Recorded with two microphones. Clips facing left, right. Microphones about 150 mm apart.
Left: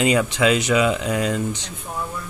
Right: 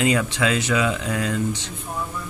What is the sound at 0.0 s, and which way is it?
Speech, 15° left (ahead or behind).